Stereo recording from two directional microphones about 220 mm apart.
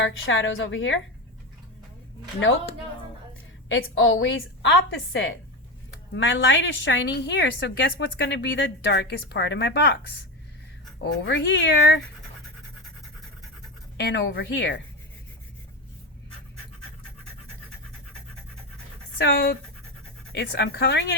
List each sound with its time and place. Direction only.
0.0 s a woman's voice: 60° left (ahead or behind)
2.4 s a woman's voice: 60° left (ahead or behind)
11.0 s a woman's voice: 55° left (ahead or behind)
13.9 s a woman's voice: 50° left (ahead or behind)
19.2 s a woman's voice: 50° left (ahead or behind)